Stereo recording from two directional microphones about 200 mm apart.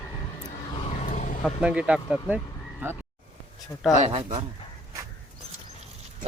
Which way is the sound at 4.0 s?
30° right (ahead or behind).